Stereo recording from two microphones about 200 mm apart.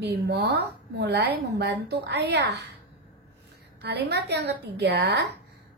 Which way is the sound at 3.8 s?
55° right (ahead or behind).